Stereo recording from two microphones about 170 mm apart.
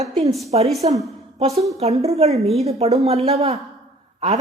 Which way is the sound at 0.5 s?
35° right (ahead or behind).